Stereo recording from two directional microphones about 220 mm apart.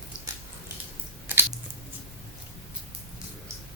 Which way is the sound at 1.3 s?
10° right (ahead or behind).